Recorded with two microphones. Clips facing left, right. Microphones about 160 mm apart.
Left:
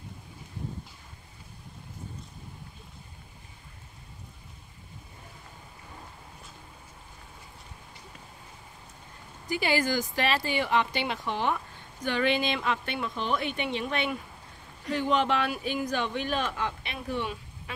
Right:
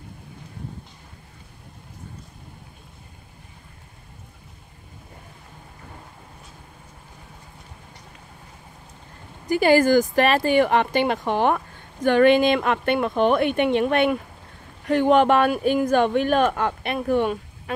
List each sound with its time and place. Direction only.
9.5 s speech: 50° right (ahead or behind)